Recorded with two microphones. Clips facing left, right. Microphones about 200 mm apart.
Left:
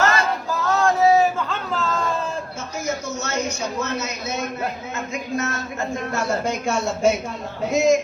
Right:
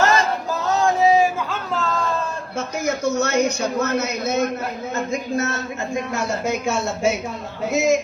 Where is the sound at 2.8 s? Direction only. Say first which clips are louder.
Right 6 dB; 60° right (ahead or behind).